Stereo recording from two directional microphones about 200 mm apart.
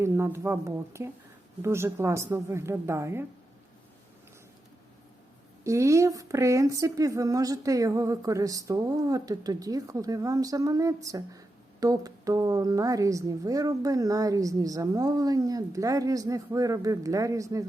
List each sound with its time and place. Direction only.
0.0 s a woman's voice: 15° right (ahead or behind)
5.6 s a woman's voice: 15° right (ahead or behind)